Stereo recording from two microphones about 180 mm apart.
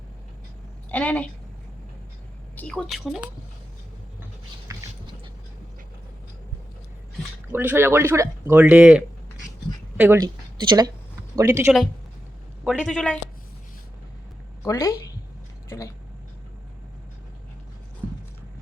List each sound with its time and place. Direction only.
0.9 s a woman's voice: 10° left (ahead or behind)
2.6 s a woman's voice: 5° left (ahead or behind)
4.7 s a sound: 20° right (ahead or behind)
7.5 s speech: 10° right (ahead or behind)
10.2 s speech: 20° right (ahead or behind)
12.6 s a woman's voice: 5° right (ahead or behind)
14.6 s a woman's voice: 15° left (ahead or behind)